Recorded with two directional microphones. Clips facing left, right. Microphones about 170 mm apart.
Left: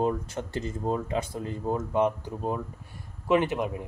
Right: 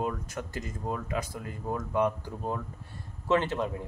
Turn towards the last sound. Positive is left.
turn(degrees=15)  # may be behind; listen again after turning